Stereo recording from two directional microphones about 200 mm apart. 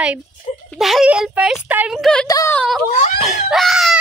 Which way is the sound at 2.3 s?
15° left (ahead or behind).